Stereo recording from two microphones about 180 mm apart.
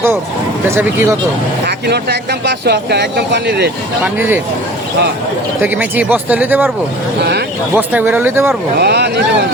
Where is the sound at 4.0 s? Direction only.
10° right (ahead or behind).